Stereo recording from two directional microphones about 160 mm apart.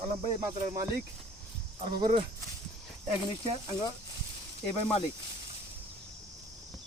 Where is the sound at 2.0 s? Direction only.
30° right (ahead or behind).